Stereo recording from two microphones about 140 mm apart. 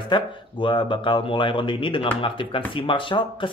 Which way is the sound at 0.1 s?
35° left (ahead or behind).